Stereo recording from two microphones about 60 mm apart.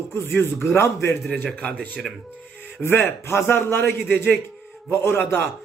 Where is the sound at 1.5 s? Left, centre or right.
Left.